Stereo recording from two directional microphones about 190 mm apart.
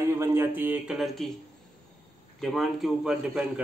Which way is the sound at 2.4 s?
Centre (ahead or behind).